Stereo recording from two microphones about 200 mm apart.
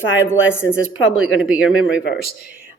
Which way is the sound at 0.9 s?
90° left.